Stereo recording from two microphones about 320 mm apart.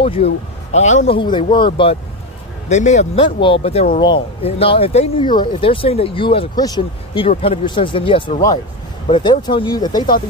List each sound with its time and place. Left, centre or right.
0.0 s speech: centre